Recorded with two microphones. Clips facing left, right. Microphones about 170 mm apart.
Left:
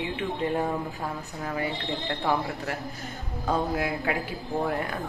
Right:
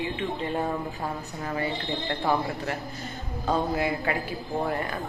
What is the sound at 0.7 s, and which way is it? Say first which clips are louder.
Speech: even; centre (ahead or behind).